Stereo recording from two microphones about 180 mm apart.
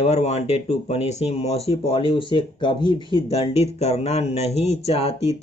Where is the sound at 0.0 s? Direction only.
35° left (ahead or behind).